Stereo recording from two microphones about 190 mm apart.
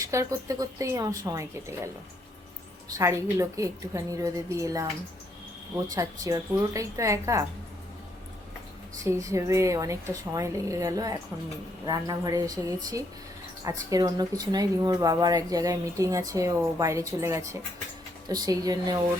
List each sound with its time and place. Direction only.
0.0 s a woman's voice: 15° right (ahead or behind)
2.9 s a woman's voice: 15° right (ahead or behind)
9.0 s a woman's voice: 15° right (ahead or behind)